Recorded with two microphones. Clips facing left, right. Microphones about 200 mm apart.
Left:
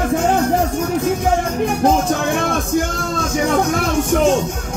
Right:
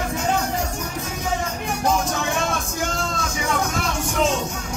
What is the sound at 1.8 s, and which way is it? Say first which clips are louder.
Music: left 5 dB; 55° left (ahead or behind).